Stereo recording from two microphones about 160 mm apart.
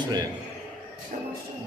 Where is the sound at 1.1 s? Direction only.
55° right (ahead or behind).